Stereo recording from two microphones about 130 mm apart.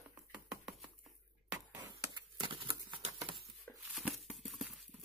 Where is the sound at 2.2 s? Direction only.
40° right (ahead or behind).